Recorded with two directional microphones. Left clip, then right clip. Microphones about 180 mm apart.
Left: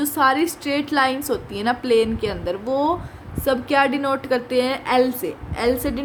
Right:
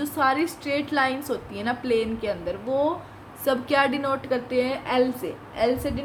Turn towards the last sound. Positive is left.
turn(degrees=55)  # may be behind; listen again after turning